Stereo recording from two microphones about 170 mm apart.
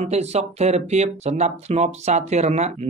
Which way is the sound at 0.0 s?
40° right (ahead or behind).